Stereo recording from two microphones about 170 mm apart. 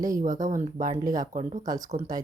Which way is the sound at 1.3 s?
45° right (ahead or behind).